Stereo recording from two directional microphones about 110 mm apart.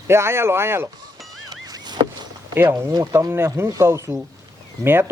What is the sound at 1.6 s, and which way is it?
Rowboat, 40° right (ahead or behind).